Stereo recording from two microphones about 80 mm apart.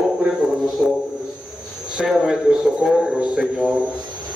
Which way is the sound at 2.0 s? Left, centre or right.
Centre.